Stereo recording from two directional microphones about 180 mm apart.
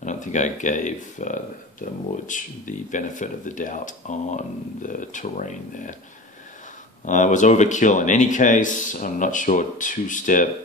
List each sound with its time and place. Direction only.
0.0 s speech: 40° left (ahead or behind)
7.1 s speech: 45° left (ahead or behind)